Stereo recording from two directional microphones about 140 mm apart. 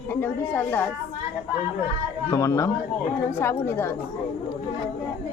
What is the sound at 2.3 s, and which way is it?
Speech, 20° left (ahead or behind).